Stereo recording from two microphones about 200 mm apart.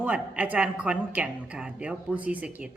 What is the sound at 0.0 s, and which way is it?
A woman's voice, 5° right (ahead or behind).